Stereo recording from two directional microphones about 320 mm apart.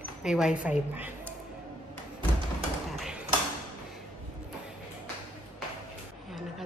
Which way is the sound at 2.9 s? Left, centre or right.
Centre.